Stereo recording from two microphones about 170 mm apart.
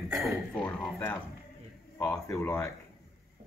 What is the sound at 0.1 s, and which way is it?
Speech, centre (ahead or behind).